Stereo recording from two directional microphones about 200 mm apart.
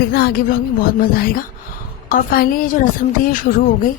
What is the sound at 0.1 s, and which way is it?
Speech, 50° left (ahead or behind).